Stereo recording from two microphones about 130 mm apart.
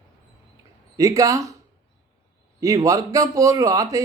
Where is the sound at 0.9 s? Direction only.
25° right (ahead or behind).